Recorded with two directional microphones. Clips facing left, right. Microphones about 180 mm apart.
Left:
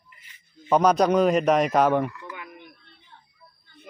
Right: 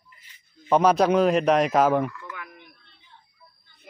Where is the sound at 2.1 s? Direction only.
20° left (ahead or behind).